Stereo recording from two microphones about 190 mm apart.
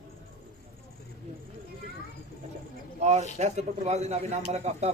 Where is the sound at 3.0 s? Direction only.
35° right (ahead or behind).